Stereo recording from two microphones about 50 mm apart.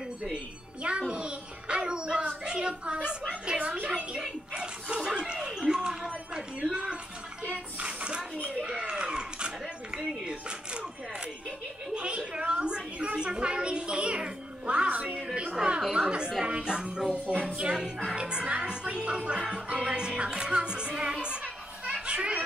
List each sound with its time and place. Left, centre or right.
0.8 s music: centre
4.6 s speech: centre
7.8 s a sound: centre
11.9 s a sound: right
15.2 s music: centre
15.8 s chatter: centre
16.4 s music: centre
17.1 s music: right
17.6 s music: centre
21.8 s children playing: right